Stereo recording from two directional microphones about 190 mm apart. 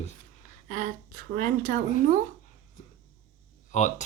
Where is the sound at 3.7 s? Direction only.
40° left (ahead or behind).